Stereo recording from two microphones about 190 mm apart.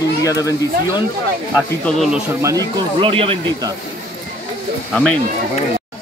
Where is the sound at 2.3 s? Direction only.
15° right (ahead or behind).